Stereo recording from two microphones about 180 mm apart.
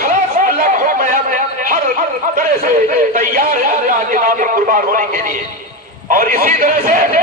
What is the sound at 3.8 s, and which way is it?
A man's voice, 50° right (ahead or behind).